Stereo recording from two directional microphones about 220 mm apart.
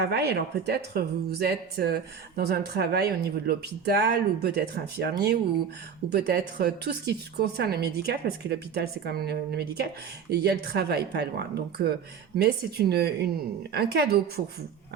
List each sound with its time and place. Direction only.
0.0 s speech: 45° right (ahead or behind)